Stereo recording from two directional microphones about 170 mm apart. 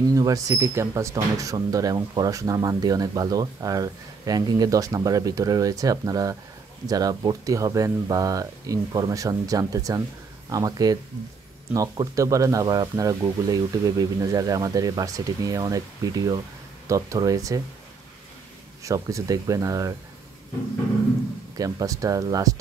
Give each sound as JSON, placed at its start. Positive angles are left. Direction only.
{"t": 0.0, "sound": "speech", "side_deg": -20}
{"t": 18.9, "sound": "speech", "side_deg": -20}
{"t": 21.5, "sound": "speech", "side_deg": -20}